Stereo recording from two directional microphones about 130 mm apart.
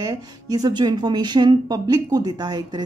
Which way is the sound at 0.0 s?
30° right (ahead or behind).